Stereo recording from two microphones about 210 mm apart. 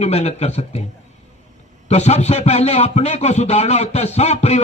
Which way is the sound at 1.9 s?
30° left (ahead or behind).